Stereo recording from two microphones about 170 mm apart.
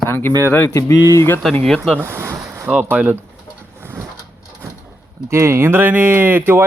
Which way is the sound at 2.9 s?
10° right (ahead or behind).